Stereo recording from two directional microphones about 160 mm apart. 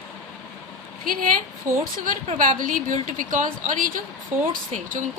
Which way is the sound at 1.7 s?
15° right (ahead or behind).